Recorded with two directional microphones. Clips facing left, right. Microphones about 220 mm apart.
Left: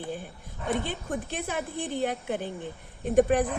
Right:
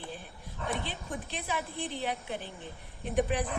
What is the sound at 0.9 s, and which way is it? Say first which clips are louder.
A man's voice: left 6 dB; 50° left (ahead or behind).